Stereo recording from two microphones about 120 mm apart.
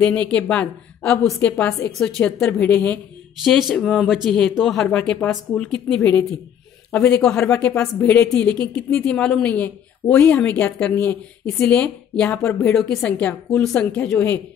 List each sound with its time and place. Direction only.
0.0 s a woman's voice: 10° left (ahead or behind)
3.4 s speech: centre (ahead or behind)
6.9 s a woman's voice: 20° left (ahead or behind)